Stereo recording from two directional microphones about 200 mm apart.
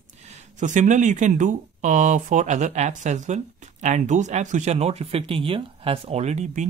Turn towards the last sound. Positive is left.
turn(degrees=-35)  # may be behind; listen again after turning